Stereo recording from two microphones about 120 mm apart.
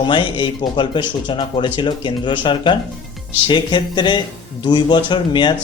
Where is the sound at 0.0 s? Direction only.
40° left (ahead or behind).